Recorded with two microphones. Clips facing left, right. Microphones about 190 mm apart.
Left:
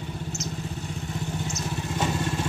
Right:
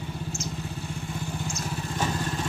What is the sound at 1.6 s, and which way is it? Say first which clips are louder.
Vehicle: left 2 dB; centre (ahead or behind).